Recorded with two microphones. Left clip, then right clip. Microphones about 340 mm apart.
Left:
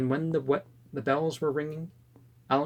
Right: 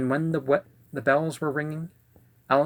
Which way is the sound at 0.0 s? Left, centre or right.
Right.